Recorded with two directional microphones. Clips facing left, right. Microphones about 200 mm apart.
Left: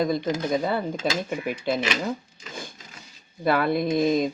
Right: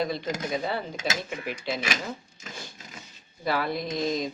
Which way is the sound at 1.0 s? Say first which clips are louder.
Left 4 dB; 50° left (ahead or behind).